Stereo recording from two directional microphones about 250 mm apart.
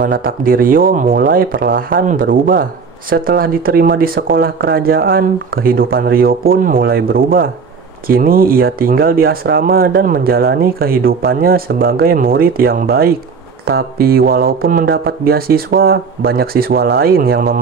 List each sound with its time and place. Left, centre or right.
0.0 s speech: right